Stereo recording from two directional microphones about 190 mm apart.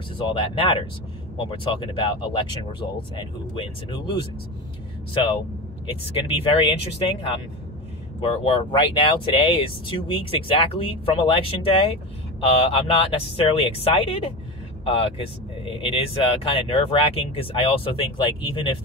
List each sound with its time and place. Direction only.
0.3 s speech: 30° left (ahead or behind)
5.1 s speech: 30° left (ahead or behind)